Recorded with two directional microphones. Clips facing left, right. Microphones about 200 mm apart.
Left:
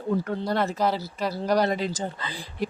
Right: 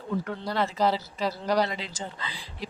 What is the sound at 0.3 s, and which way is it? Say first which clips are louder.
Speech: left 4 dB; 50° left (ahead or behind).